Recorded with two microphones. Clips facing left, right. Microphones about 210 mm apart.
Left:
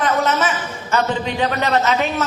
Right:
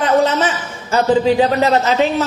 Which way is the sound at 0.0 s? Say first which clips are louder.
Right 4 dB; 30° right (ahead or behind).